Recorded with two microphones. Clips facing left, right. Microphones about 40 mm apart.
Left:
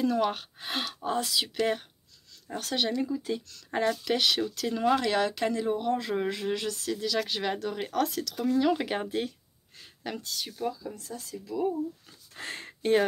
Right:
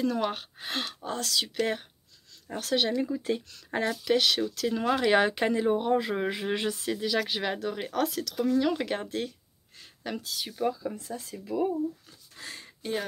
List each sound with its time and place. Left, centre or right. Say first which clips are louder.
0.0 s speech: left 2 dB; centre
3.1 s speech: right 2 dB; centre
3.7 s speech: right 1 dB; centre
5.1 s speech: right 3 dB; right
7.2 s speech: even; centre
10.7 s speech: right 4 dB; right
12.4 s speech: left 5 dB; left